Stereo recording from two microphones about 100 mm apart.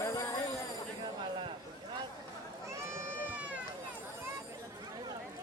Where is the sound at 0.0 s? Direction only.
35° left (ahead or behind).